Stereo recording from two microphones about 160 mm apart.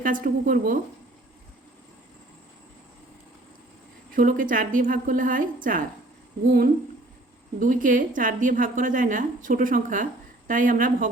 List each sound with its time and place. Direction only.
0.0 s a woman's voice: 60° right (ahead or behind)
4.1 s a woman's voice: 60° right (ahead or behind)
7.6 s a woman's voice: 55° right (ahead or behind)